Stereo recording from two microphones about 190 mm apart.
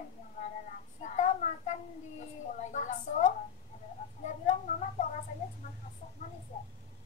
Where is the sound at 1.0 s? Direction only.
40° left (ahead or behind).